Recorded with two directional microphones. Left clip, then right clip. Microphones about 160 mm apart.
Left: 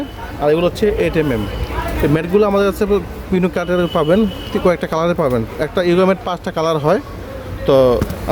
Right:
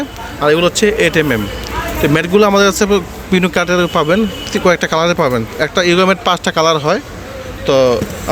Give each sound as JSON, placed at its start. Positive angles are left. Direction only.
{"t": 0.4, "sound": "a man's voice", "side_deg": 0}
{"t": 6.2, "sound": "speech", "side_deg": 0}
{"t": 7.6, "sound": "speech", "side_deg": 20}